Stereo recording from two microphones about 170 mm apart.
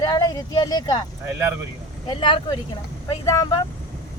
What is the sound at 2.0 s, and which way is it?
Speech, 30° left (ahead or behind).